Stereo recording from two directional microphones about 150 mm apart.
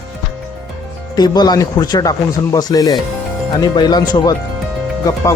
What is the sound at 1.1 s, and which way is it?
Speech, 25° left (ahead or behind).